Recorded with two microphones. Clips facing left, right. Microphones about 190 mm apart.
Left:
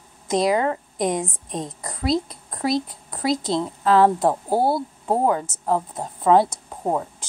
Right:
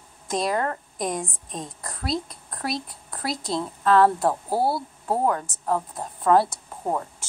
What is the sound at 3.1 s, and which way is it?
A woman's voice, 20° left (ahead or behind).